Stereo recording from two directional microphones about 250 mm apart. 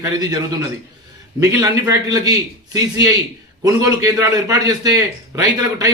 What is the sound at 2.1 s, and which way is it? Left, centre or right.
A man's voice, centre.